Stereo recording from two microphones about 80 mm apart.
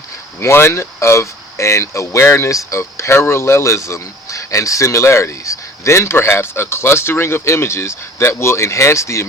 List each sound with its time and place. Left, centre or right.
0.3 s speech: left